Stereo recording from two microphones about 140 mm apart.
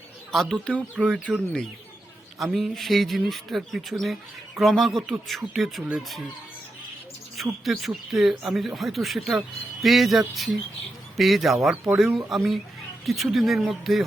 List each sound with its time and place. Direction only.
0.3 s speech: centre (ahead or behind)
0.9 s speech: 5° right (ahead or behind)
2.4 s speech: centre (ahead or behind)
7.6 s speech: centre (ahead or behind)